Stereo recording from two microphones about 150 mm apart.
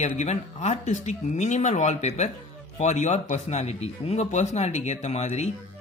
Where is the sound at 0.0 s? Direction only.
50° left (ahead or behind).